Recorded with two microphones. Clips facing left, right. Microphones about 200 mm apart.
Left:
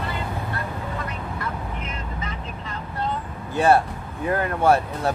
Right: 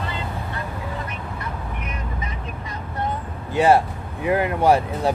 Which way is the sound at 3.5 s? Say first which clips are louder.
Right 2 dB; 20° right (ahead or behind).